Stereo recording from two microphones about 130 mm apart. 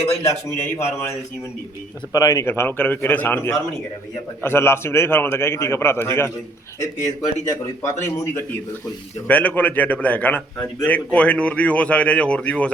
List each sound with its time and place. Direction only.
2.1 s a man's voice: 25° left (ahead or behind)
7.4 s a man's voice: 20° left (ahead or behind)